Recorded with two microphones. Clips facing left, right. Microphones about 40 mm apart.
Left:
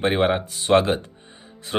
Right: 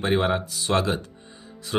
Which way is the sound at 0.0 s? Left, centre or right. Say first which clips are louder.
Left 2 dB; left.